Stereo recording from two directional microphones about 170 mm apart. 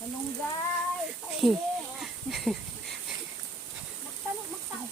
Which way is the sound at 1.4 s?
Centre (ahead or behind).